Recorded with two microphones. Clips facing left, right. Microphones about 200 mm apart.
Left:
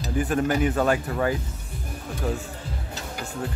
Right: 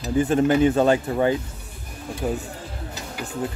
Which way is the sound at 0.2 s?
25° right (ahead or behind).